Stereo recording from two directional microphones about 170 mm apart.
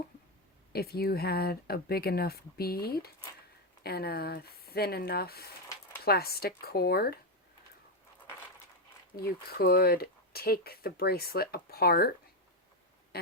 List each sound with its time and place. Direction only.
0.7 s speech: 65° left (ahead or behind)
9.1 s speech: 65° left (ahead or behind)